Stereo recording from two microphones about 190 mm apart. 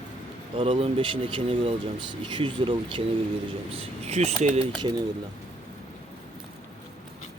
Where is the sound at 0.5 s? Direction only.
30° right (ahead or behind).